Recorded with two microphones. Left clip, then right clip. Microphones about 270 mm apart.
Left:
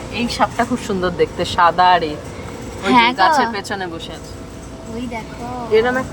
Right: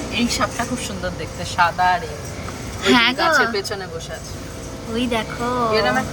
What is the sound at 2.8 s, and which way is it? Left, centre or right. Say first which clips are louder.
Speech: left 3 dB; centre.